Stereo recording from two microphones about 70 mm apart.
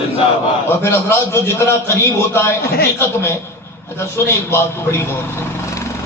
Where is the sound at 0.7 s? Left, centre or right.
Left.